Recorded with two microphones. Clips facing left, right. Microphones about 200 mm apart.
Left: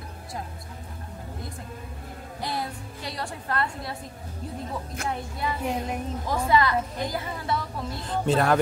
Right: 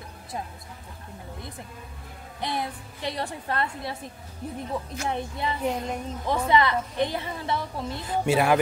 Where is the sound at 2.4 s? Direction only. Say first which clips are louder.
Right 1 dB; 20° right (ahead or behind).